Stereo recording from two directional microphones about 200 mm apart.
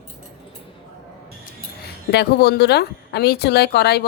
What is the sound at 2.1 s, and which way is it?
Speech, 55° left (ahead or behind).